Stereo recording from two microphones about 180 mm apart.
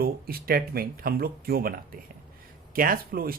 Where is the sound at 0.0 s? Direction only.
55° right (ahead or behind).